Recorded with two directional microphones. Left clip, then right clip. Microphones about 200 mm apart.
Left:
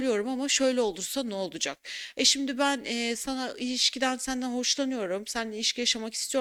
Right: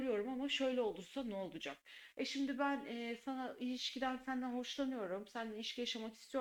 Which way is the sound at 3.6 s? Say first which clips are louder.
Left 15 dB; 90° left.